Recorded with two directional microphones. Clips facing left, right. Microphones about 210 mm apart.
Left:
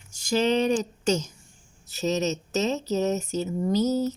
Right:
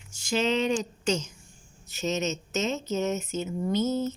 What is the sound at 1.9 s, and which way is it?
A woman's voice, 40° left (ahead or behind).